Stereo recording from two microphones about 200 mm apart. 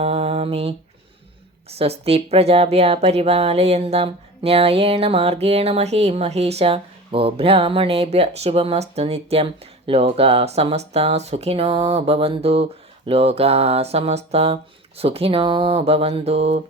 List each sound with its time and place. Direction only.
0.0 s mantra: 30° right (ahead or behind)
1.6 s a woman's voice: 30° right (ahead or behind)